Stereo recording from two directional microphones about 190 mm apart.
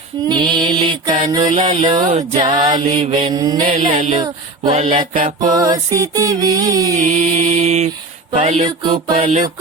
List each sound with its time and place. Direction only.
0.3 s music: 25° right (ahead or behind)
1.5 s mantra: 30° right (ahead or behind)
2.4 s music: 30° right (ahead or behind)
3.3 s music: 20° right (ahead or behind)
3.7 s mantra: 40° right (ahead or behind)
5.5 s music: 20° right (ahead or behind)
6.9 s mantra: 45° right (ahead or behind)
8.6 s music: 25° right (ahead or behind)